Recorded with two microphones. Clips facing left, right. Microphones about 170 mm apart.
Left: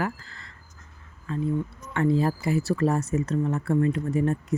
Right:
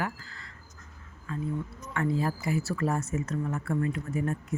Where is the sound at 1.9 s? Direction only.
30° left (ahead or behind).